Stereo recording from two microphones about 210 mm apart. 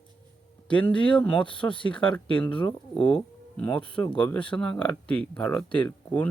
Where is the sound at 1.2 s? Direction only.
5° left (ahead or behind).